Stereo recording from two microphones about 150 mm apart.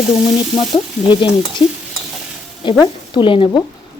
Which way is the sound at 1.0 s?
30° left (ahead or behind).